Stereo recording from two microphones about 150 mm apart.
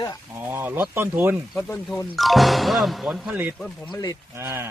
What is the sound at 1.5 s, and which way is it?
Speech, 10° left (ahead or behind).